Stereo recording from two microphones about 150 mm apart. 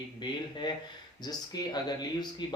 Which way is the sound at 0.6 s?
30° left (ahead or behind).